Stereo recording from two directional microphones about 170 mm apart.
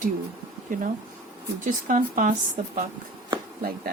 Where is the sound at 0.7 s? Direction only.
50° right (ahead or behind).